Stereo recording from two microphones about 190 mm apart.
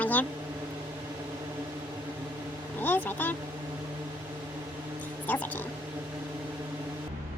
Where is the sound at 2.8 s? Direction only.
10° left (ahead or behind).